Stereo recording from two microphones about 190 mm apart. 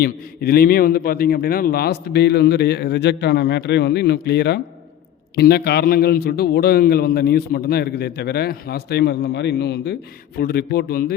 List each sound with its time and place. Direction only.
0.0 s a man's voice: 55° left (ahead or behind)